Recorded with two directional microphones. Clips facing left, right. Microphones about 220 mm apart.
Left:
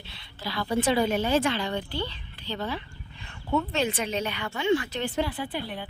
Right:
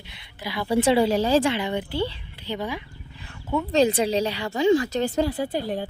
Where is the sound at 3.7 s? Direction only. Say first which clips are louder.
Right 8 dB; 35° right (ahead or behind).